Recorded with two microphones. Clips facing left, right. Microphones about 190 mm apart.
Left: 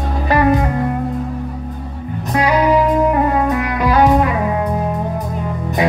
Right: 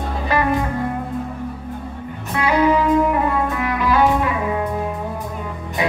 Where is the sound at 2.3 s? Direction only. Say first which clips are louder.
Left 3 dB; 40° left (ahead or behind).